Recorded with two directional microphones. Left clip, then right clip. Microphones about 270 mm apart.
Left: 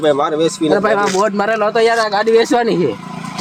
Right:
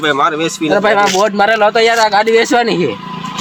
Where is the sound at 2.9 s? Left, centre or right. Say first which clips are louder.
Right 4 dB; left.